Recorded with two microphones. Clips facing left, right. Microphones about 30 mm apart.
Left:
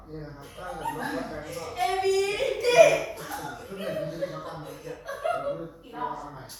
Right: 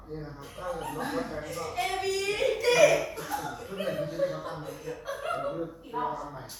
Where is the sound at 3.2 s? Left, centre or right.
Centre.